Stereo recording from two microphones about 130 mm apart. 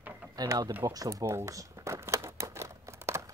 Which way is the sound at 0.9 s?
25° right (ahead or behind).